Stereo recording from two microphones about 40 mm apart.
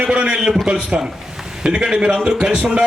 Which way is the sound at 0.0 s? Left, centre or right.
Right.